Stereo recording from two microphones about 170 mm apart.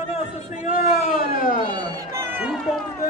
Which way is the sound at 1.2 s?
55° left (ahead or behind).